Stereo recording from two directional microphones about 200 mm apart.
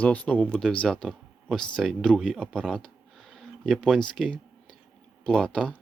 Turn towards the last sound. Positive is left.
turn(degrees=0)  # may be behind; listen again after turning